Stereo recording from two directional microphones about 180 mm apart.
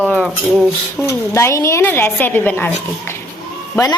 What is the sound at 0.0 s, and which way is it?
A woman's voice, 5° left (ahead or behind).